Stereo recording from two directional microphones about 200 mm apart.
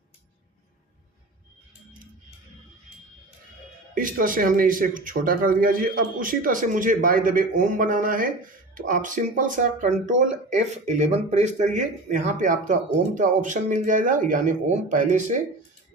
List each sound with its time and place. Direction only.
3.9 s speech: 45° right (ahead or behind)